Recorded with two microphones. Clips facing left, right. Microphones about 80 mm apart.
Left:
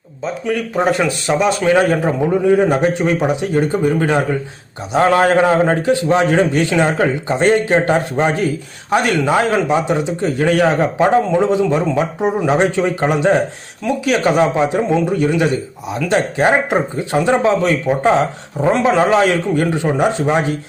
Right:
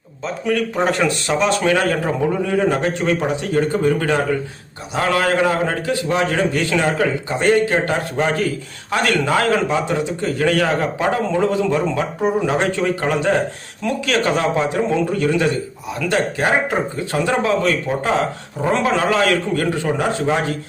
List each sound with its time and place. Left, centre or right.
0.4 s a man's voice: centre